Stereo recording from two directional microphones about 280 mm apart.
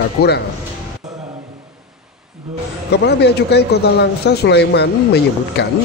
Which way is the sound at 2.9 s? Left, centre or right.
Left.